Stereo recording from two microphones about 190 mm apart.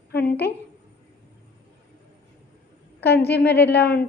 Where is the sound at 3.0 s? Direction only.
60° left (ahead or behind).